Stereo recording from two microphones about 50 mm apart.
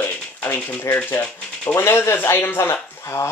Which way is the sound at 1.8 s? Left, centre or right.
Left.